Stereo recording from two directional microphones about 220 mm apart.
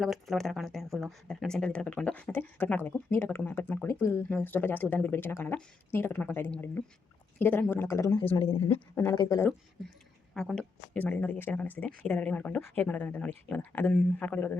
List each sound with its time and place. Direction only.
0.0 s speech: centre (ahead or behind)
8.4 s speech: 25° left (ahead or behind)
10.3 s speech: 5° left (ahead or behind)